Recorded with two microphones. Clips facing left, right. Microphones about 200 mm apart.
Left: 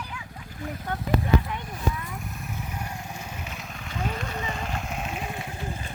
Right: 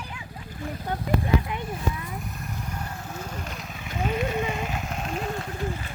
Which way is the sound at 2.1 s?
Centre (ahead or behind).